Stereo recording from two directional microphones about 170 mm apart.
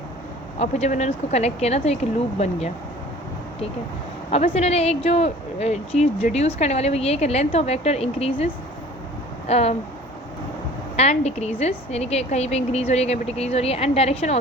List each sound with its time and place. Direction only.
0.6 s speech: 40° left (ahead or behind)
4.3 s speech: 35° left (ahead or behind)
9.5 s speech: 40° left (ahead or behind)
10.9 s speech: 40° left (ahead or behind)